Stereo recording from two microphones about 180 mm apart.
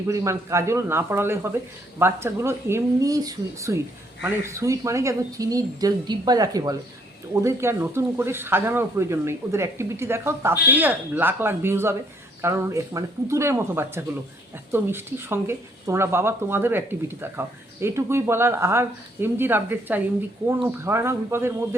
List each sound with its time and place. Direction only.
0.1 s speech: 15° right (ahead or behind)